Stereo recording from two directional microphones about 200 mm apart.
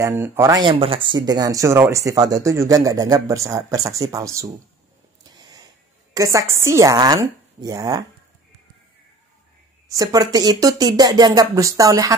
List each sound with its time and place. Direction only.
0.0 s speech: 10° right (ahead or behind)
6.1 s speech: 15° right (ahead or behind)
9.8 s speech: 20° right (ahead or behind)